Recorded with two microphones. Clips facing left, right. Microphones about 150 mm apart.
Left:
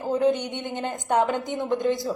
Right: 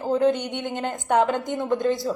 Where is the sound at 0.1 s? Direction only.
15° left (ahead or behind).